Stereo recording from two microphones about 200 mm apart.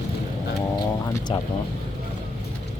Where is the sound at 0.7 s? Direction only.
20° left (ahead or behind).